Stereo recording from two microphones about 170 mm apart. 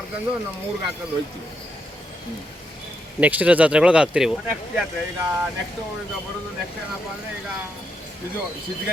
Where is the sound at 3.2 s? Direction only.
10° right (ahead or behind).